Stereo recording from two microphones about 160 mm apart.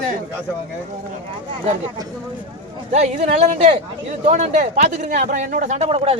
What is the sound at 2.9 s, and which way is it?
A man's voice, 45° right (ahead or behind).